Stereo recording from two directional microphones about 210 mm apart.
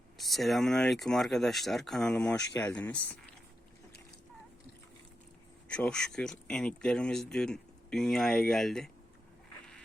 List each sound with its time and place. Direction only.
0.2 s speech: centre (ahead or behind)
2.4 s speech: 15° left (ahead or behind)
5.6 s speech: 5° left (ahead or behind)